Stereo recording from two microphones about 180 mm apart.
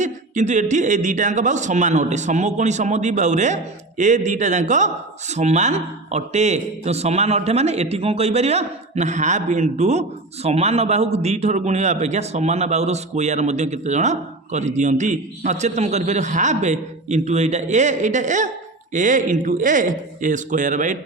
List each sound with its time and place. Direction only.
0.0 s a man's voice: 40° right (ahead or behind)